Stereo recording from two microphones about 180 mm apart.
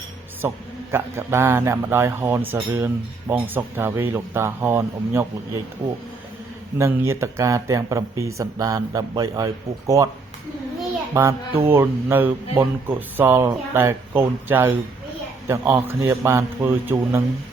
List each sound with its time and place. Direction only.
0.4 s a man's voice: 15° right (ahead or behind)
6.7 s a man's voice: 15° right (ahead or behind)
11.1 s a man's voice: 15° right (ahead or behind)